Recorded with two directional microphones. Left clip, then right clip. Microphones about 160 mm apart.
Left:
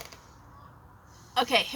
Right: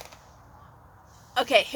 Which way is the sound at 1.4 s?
45° right (ahead or behind).